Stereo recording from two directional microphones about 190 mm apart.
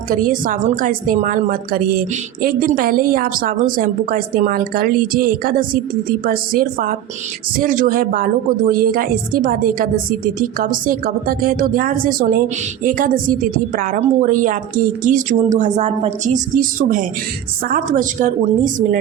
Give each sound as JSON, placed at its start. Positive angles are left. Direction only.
{"t": 0.1, "sound": "a woman's voice", "side_deg": -45}